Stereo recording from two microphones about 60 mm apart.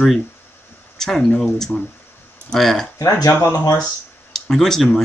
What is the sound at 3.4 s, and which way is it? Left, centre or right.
Speech, left.